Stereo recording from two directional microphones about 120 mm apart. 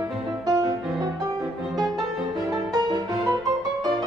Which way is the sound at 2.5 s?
30° right (ahead or behind).